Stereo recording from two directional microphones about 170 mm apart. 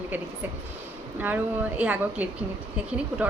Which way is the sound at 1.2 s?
10° right (ahead or behind).